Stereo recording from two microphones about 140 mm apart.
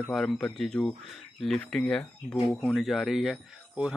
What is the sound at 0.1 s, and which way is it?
Speech, centre (ahead or behind).